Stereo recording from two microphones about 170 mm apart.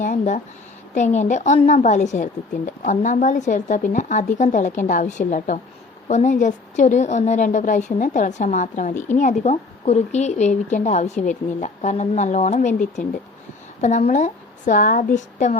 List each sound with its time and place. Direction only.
0.0 s a sound: 45° left (ahead or behind)
0.9 s a woman's voice: 45° left (ahead or behind)
13.8 s a woman's voice: 45° left (ahead or behind)